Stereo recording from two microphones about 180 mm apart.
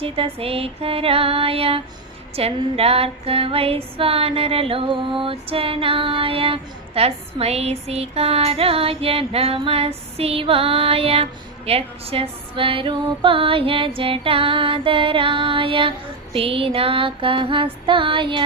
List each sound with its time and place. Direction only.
0.0 s female singing: 30° right (ahead or behind)
16.3 s music: 30° right (ahead or behind)